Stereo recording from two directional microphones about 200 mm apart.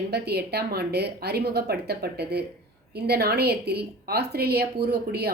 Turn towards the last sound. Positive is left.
turn(degrees=-55)  # may be behind; listen again after turning